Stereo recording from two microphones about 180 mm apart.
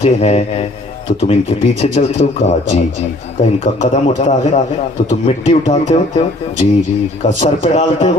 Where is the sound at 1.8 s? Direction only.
40° left (ahead or behind).